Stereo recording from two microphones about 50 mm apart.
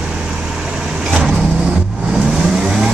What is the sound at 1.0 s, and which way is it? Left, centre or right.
Vehicle, centre.